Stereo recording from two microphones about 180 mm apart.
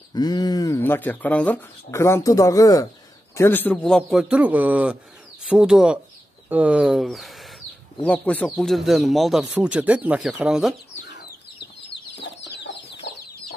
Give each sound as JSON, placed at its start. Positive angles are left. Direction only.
{"t": 0.1, "sound": "speech", "side_deg": 20}
{"t": 11.9, "sound": "chicken", "side_deg": 75}